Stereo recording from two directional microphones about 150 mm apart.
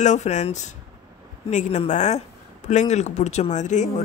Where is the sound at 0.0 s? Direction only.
50° left (ahead or behind).